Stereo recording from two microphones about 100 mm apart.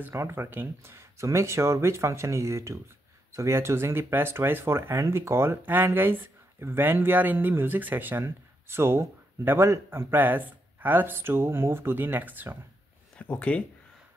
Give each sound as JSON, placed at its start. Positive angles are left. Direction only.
{"t": 0.1, "sound": "speech", "side_deg": -25}
{"t": 13.2, "sound": "speech", "side_deg": 15}